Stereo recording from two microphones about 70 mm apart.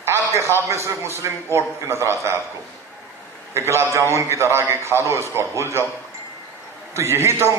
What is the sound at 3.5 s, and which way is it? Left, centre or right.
A man's voice, right.